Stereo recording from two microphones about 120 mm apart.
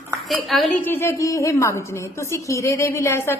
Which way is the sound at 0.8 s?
20° left (ahead or behind).